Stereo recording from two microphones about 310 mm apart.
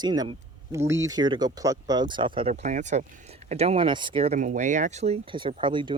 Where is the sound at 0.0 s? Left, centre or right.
Centre.